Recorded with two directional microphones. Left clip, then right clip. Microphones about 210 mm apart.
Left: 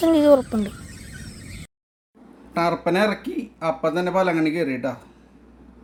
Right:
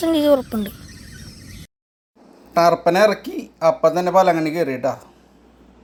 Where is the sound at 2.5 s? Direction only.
5° right (ahead or behind).